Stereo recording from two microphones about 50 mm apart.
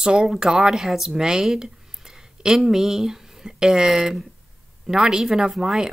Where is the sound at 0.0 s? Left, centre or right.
Centre.